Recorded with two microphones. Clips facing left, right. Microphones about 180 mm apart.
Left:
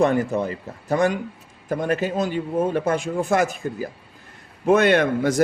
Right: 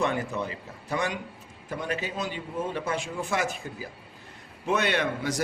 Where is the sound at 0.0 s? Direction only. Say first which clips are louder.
Left 9 dB; 45° left (ahead or behind).